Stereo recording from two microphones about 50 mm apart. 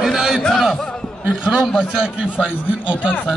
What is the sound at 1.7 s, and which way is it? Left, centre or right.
Speech, centre.